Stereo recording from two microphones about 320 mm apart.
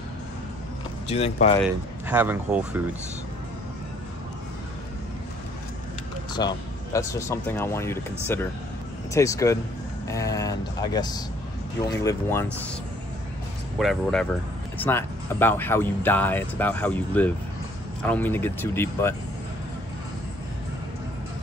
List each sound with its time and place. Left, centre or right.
1.0 s speech: centre
2.0 s speech: centre
6.3 s speech: centre
13.7 s speech: centre